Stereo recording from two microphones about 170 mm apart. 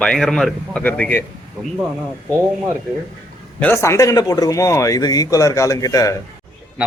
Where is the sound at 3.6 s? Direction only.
15° left (ahead or behind).